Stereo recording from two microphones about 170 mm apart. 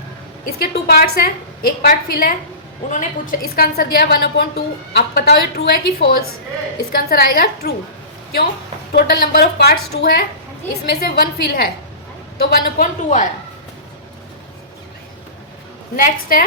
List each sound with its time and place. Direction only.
0.6 s a woman's voice: 65° left (ahead or behind)
2.9 s a woman's voice: 50° left (ahead or behind); by 7.8 s 65° left (ahead or behind)
8.9 s a woman's voice: 65° left (ahead or behind); by 13.2 s 50° left (ahead or behind)
16.0 s a woman's voice: 55° left (ahead or behind)